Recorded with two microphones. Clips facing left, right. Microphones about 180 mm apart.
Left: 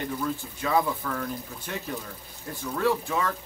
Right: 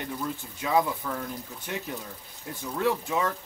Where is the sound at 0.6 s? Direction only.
15° right (ahead or behind).